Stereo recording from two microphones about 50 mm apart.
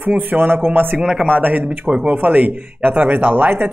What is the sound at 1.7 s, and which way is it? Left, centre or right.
Speech, right.